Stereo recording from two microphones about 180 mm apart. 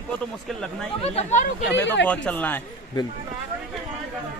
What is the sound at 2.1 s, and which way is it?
Speech, 10° left (ahead or behind).